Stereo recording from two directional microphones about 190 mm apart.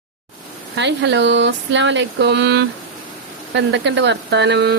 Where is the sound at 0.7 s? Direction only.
70° right (ahead or behind).